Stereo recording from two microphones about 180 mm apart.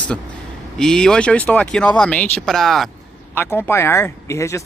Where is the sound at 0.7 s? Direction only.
5° left (ahead or behind).